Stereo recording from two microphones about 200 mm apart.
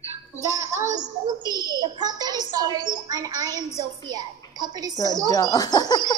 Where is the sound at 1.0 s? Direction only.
20° right (ahead or behind).